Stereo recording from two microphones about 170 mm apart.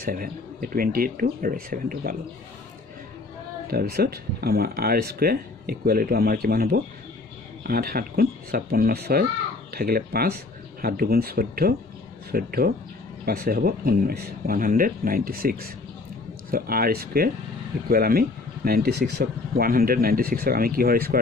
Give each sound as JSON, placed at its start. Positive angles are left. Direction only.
{"t": 0.0, "sound": "speech", "side_deg": -60}
{"t": 3.7, "sound": "speech", "side_deg": -65}